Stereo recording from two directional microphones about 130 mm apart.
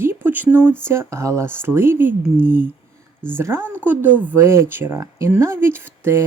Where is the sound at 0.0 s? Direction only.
15° right (ahead or behind).